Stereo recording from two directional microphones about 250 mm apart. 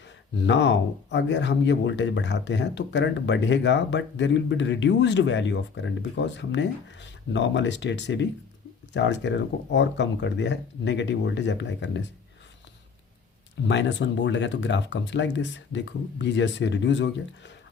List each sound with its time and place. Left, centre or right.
0.0 s speech: left
13.7 s speech: left